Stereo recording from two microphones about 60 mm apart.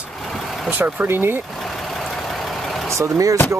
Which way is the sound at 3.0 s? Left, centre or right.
Right.